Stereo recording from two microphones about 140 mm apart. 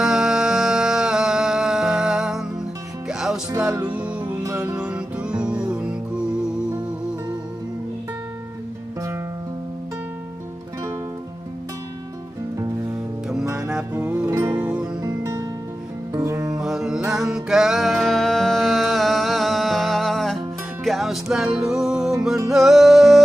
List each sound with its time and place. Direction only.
0.0 s music: centre (ahead or behind)
13.6 s music: 5° right (ahead or behind); by 14.6 s 25° right (ahead or behind)
14.6 s music: 10° right (ahead or behind)
15.0 s music: 25° right (ahead or behind)
16.6 s music: 5° right (ahead or behind)